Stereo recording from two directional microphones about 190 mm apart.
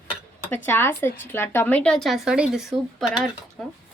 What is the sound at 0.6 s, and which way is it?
A woman's voice, 10° left (ahead or behind).